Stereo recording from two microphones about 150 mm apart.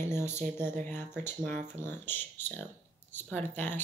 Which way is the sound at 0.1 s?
15° left (ahead or behind).